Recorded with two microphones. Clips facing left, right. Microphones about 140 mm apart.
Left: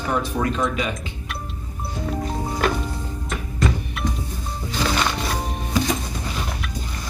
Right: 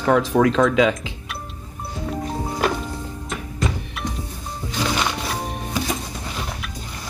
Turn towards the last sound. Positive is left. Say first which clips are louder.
# left 2 dB
turn(degrees=-5)  # may be behind; listen again after turning